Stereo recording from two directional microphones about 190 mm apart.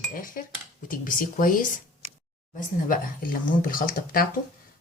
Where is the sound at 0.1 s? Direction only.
45° left (ahead or behind).